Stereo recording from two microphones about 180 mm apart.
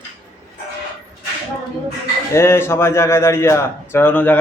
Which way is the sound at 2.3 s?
15° left (ahead or behind).